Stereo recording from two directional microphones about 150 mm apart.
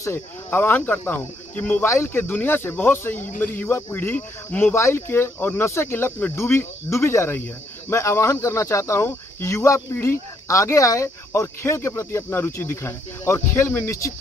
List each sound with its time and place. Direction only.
0.0 s speech: 15° left (ahead or behind)